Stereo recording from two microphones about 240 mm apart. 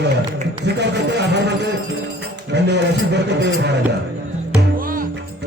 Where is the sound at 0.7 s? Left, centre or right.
Right.